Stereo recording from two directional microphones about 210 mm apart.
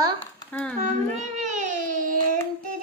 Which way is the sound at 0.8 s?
35° right (ahead or behind).